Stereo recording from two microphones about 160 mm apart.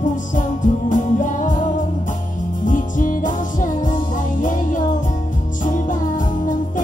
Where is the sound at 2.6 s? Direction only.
55° left (ahead or behind).